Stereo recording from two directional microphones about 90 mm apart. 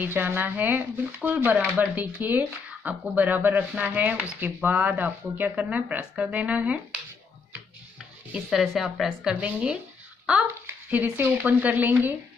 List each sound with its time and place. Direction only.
0.0 s speech: 20° right (ahead or behind)
8.5 s speech: centre (ahead or behind)
10.9 s speech: 20° right (ahead or behind)